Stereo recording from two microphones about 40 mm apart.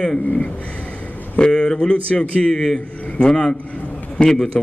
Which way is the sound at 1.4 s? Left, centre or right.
Left.